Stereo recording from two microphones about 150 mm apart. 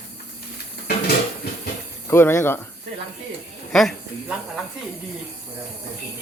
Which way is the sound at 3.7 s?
5° left (ahead or behind).